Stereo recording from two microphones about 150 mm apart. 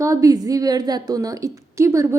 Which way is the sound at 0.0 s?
20° right (ahead or behind).